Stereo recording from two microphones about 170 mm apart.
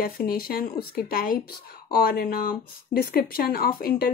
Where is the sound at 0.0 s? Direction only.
60° left (ahead or behind).